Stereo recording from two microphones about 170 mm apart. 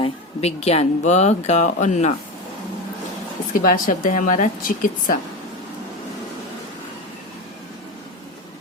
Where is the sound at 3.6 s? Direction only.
50° left (ahead or behind).